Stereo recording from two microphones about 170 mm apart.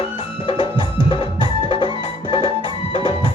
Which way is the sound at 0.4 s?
30° left (ahead or behind).